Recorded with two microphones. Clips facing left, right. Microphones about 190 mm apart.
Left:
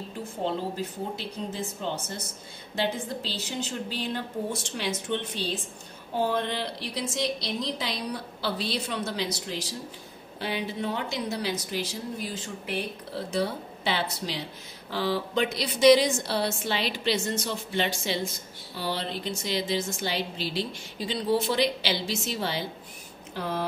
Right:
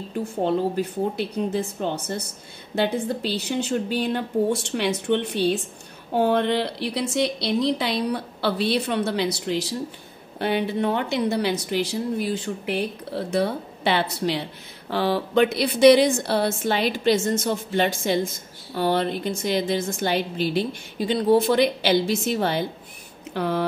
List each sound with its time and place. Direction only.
0.4 s a woman's voice: 65° right (ahead or behind)
23.3 s speech: 65° right (ahead or behind)